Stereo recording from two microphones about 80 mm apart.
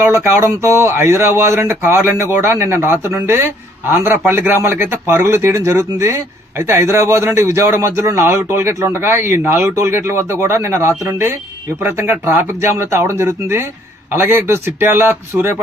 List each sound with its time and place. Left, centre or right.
0.1 s a man's voice: right